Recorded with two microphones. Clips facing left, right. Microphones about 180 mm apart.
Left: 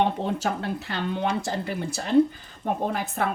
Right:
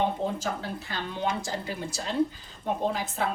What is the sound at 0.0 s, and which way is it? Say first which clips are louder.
A woman's voice: left 3 dB; 70° left (ahead or behind).